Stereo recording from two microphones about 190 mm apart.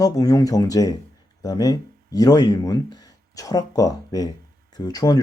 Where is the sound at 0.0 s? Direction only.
20° left (ahead or behind).